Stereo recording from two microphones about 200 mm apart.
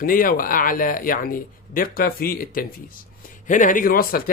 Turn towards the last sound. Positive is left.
turn(degrees=45)  # may be behind; listen again after turning